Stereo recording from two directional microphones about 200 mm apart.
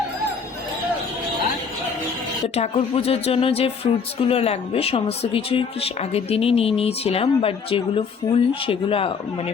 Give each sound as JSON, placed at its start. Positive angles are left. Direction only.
{"t": 2.4, "sound": "speech", "side_deg": 30}